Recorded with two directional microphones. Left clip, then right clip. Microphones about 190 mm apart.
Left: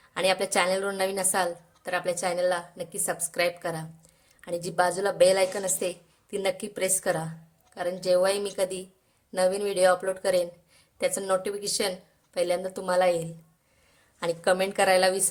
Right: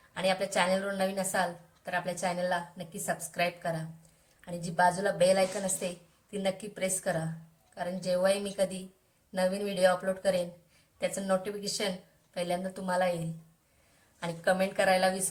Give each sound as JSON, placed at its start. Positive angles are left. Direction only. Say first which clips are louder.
{"t": 0.1, "sound": "a woman's voice", "louder": "left 5 dB", "side_deg": 60}
{"t": 14.2, "sound": "a woman's voice", "louder": "left 4 dB", "side_deg": 55}